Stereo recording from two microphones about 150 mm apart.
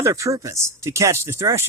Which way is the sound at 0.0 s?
20° right (ahead or behind).